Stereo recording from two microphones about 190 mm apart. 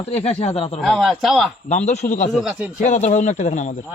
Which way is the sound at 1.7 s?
35° left (ahead or behind).